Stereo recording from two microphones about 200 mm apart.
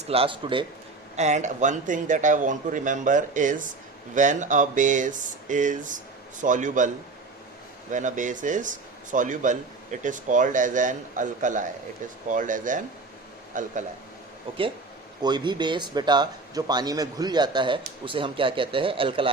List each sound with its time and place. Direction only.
0.1 s a man's voice: 25° right (ahead or behind)
15.2 s a man's voice: 20° right (ahead or behind)